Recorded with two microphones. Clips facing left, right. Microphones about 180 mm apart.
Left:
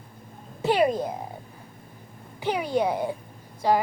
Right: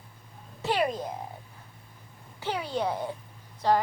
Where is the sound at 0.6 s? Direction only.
15° left (ahead or behind).